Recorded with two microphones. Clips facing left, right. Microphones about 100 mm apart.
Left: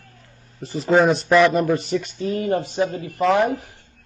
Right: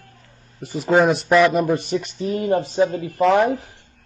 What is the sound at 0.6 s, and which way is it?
A man's voice, centre (ahead or behind).